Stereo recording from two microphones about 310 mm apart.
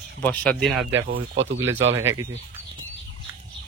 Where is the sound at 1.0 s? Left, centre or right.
Right.